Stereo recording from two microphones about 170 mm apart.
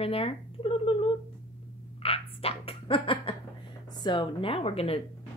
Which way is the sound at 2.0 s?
35° left (ahead or behind).